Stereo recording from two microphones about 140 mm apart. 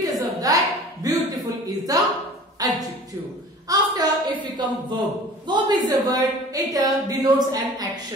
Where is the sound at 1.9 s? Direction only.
25° right (ahead or behind).